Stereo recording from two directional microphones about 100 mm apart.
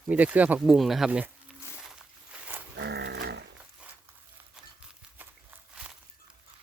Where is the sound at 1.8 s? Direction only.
15° right (ahead or behind).